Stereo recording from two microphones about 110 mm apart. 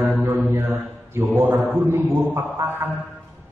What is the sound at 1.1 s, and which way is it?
A man's voice, 20° right (ahead or behind).